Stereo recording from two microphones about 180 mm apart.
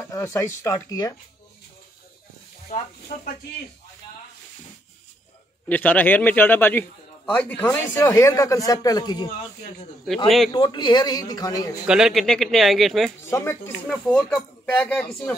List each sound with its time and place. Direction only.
0.0 s a man's voice: 15° left (ahead or behind)
2.7 s speech: 50° left (ahead or behind)
5.7 s a man's voice: 10° left (ahead or behind)
10.5 s a man's voice: 25° left (ahead or behind)
11.9 s speech: centre (ahead or behind)
13.3 s a man's voice: 15° left (ahead or behind)
13.8 s speech: 5° left (ahead or behind)